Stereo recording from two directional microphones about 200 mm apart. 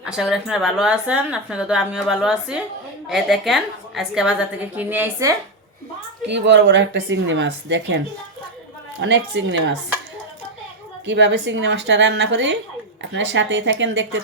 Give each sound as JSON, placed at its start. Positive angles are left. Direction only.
{"t": 0.0, "sound": "speech", "side_deg": -5}
{"t": 6.2, "sound": "speech", "side_deg": -60}
{"t": 9.0, "sound": "speech", "side_deg": -65}
{"t": 11.0, "sound": "speech", "side_deg": -65}